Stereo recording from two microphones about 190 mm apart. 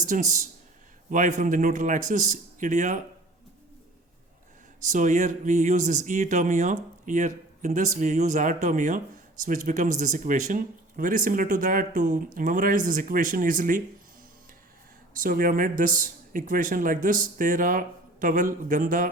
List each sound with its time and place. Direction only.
0.0 s speech: 40° right (ahead or behind)
4.9 s speech: 40° right (ahead or behind)
15.2 s speech: 45° right (ahead or behind)